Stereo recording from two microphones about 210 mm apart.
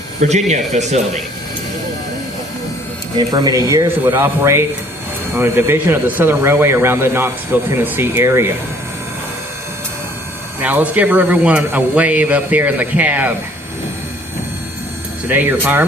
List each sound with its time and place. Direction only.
0.2 s speech: 35° right (ahead or behind)
3.2 s speech: 20° right (ahead or behind)
10.6 s speech: 5° right (ahead or behind)
15.3 s speech: 10° right (ahead or behind)